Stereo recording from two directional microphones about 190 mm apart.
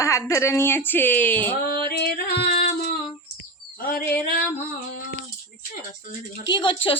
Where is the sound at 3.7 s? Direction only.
50° left (ahead or behind).